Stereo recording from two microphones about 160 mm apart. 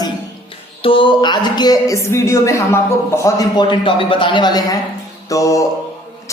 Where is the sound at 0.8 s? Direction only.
35° left (ahead or behind).